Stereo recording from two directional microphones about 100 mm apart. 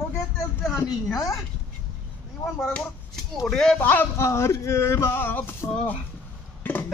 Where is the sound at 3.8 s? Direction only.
20° left (ahead or behind).